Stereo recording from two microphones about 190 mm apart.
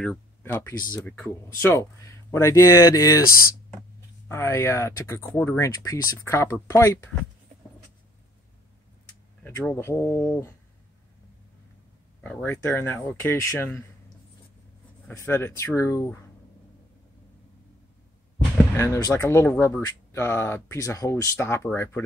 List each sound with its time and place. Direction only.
0.4 s speech: 10° left (ahead or behind)
4.3 s speech: 15° left (ahead or behind)
9.4 s speech: 10° left (ahead or behind)
12.2 s speech: 5° left (ahead or behind)
15.0 s speech: 10° left (ahead or behind)
18.8 s speech: 15° left (ahead or behind)